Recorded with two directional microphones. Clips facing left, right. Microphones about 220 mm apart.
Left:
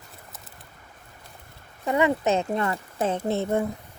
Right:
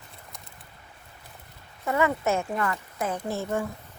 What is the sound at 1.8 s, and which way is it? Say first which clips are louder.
A woman's voice: left 3 dB; 20° left (ahead or behind).